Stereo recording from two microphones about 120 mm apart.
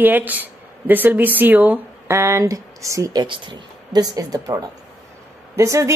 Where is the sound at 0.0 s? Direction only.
15° right (ahead or behind); by 4.6 s 30° right (ahead or behind).